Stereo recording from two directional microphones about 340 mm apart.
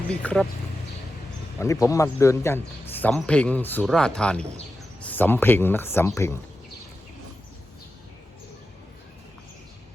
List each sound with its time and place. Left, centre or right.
0.1 s a man's voice: centre
1.5 s a man's voice: centre